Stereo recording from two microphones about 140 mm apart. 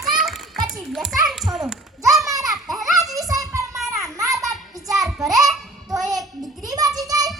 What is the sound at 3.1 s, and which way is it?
Music, 25° right (ahead or behind).